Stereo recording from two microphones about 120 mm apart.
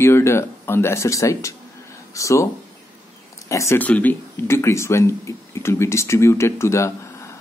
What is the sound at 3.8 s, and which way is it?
Speech, 15° left (ahead or behind).